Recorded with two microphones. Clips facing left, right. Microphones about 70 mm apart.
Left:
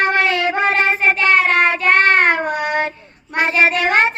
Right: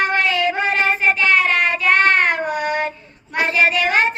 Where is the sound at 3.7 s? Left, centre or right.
Left.